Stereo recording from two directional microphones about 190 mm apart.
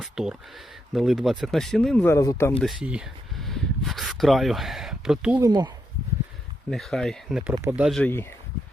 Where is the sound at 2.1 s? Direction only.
15° left (ahead or behind).